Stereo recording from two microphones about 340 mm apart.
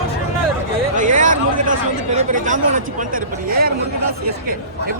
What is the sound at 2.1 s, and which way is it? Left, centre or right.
Speech, right.